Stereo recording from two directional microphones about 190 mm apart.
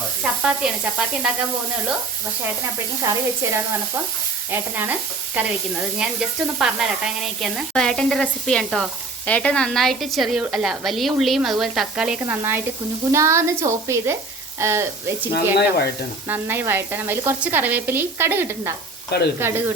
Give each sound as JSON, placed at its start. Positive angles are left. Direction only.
{"t": 0.2, "sound": "sizzle", "side_deg": -5}
{"t": 3.0, "sound": "speech", "side_deg": -15}
{"t": 6.0, "sound": "sizzle", "side_deg": -5}
{"t": 12.2, "sound": "speech", "side_deg": -10}
{"t": 16.3, "sound": "speech", "side_deg": -10}